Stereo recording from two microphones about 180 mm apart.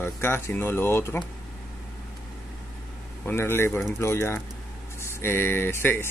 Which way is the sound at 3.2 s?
15° left (ahead or behind).